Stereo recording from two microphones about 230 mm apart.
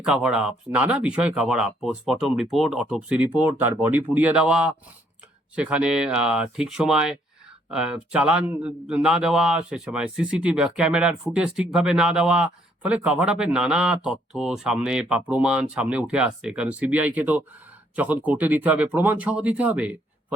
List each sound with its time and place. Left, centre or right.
0.0 s a man's voice: centre